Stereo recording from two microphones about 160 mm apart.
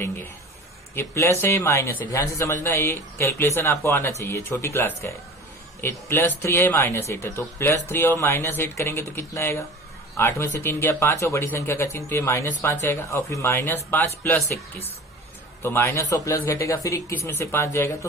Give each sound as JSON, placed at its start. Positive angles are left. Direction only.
{"t": 0.9, "sound": "speech", "side_deg": 15}